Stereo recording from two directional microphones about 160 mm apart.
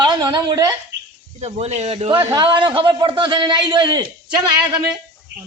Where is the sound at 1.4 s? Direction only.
40° right (ahead or behind); by 4.1 s 25° right (ahead or behind).